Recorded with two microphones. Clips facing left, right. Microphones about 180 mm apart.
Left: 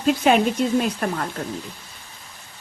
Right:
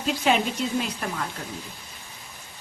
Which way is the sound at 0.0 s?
50° left (ahead or behind).